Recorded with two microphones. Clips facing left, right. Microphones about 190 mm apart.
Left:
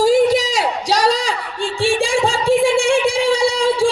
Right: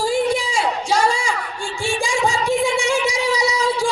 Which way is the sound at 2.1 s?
30° left (ahead or behind).